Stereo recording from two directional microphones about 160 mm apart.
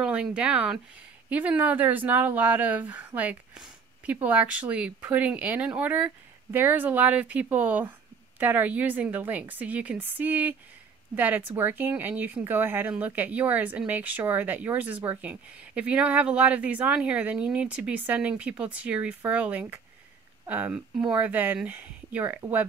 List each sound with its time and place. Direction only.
0.0 s speech: 5° right (ahead or behind)